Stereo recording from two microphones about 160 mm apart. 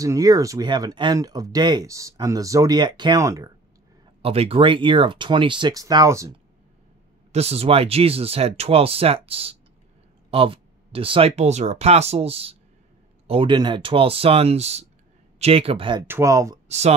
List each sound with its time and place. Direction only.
0.0 s speech: 20° right (ahead or behind)
4.2 s speech: 35° right (ahead or behind); by 6.3 s 20° right (ahead or behind)
7.3 s speech: 40° right (ahead or behind)
16.1 s speech: 15° right (ahead or behind)
16.6 s speech: 45° right (ahead or behind)